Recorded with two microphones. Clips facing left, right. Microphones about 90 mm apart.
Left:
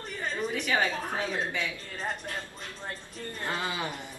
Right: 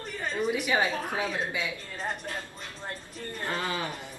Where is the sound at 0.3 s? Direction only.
10° right (ahead or behind).